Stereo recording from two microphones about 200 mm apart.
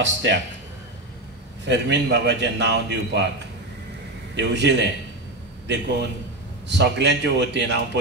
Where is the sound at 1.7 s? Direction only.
60° right (ahead or behind).